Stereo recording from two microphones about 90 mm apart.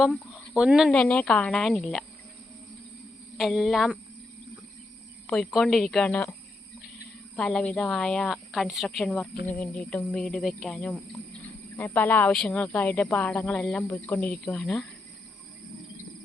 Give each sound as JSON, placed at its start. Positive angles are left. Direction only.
{"t": 0.1, "sound": "speech", "side_deg": -10}
{"t": 0.9, "sound": "a woman's voice", "side_deg": 5}
{"t": 3.3, "sound": "a woman's voice", "side_deg": 0}
{"t": 5.2, "sound": "a woman's voice", "side_deg": 5}
{"t": 7.3, "sound": "a woman's voice", "side_deg": 10}
{"t": 9.1, "sound": "speech", "side_deg": 15}
{"t": 10.8, "sound": "speech", "side_deg": 15}
{"t": 12.3, "sound": "a woman's voice", "side_deg": 5}
{"t": 12.5, "sound": "speech", "side_deg": 15}
{"t": 14.4, "sound": "a woman's voice", "side_deg": 5}